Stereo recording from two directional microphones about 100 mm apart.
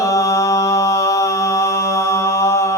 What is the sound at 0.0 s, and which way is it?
Mantra, 30° left (ahead or behind).